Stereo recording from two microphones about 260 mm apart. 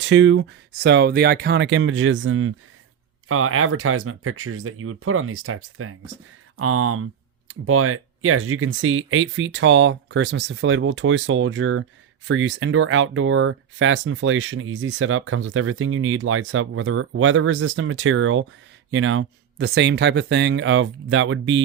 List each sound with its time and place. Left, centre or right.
0.0 s speech: right